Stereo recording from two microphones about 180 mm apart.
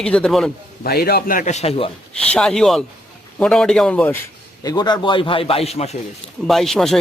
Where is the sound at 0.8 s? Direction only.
60° left (ahead or behind); by 1.9 s 35° left (ahead or behind).